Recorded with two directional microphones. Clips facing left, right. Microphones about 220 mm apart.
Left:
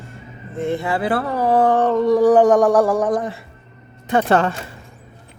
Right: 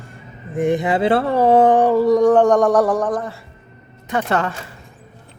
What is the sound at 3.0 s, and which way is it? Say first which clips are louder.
Speech: left 2 dB; 15° left (ahead or behind).